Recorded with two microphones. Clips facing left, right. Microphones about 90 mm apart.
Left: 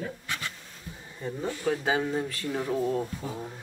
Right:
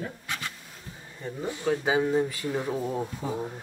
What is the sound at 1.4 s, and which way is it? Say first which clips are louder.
Speech: right 1 dB; 15° right (ahead or behind).